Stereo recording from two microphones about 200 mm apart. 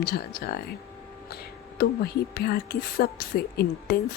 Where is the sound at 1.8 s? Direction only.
50° left (ahead or behind).